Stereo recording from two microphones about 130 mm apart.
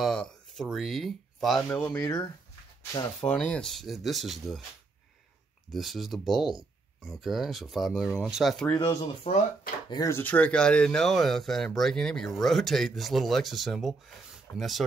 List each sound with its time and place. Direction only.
0.0 s speech: 5° left (ahead or behind)
1.7 s speech: 20° left (ahead or behind); by 3.3 s 40° left (ahead or behind)
3.3 s speech: 10° left (ahead or behind)
5.7 s speech: centre (ahead or behind)
8.7 s speech: 30° left (ahead or behind)
10.1 s speech: 10° left (ahead or behind)